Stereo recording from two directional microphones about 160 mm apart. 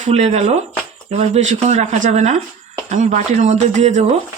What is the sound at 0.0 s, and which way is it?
Speech, 45° right (ahead or behind).